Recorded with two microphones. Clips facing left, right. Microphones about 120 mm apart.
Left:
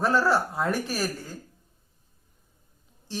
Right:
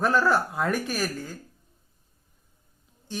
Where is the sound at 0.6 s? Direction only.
35° left (ahead or behind).